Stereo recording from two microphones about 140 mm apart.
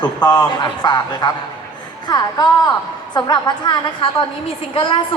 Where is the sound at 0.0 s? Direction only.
30° left (ahead or behind).